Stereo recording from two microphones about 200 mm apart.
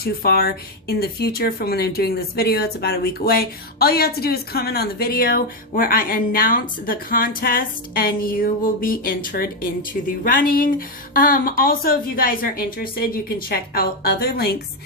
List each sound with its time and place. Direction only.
0.0 s speech: 50° left (ahead or behind)